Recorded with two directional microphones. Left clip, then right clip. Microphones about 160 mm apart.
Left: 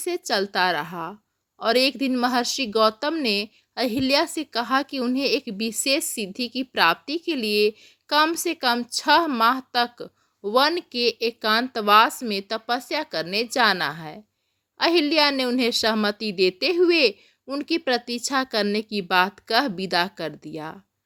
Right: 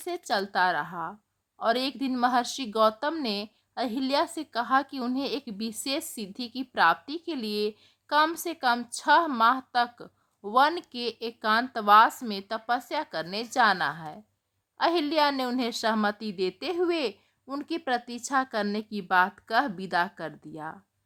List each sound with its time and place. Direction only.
0.0 s a woman's voice: 20° left (ahead or behind)